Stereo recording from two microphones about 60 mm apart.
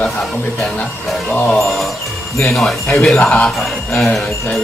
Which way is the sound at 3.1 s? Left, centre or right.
Left.